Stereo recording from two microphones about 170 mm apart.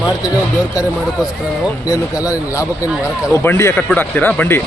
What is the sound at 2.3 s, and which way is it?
Speech, 20° left (ahead or behind).